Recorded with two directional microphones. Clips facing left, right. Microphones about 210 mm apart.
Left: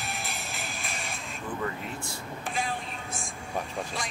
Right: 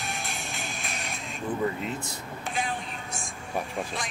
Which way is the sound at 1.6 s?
20° right (ahead or behind).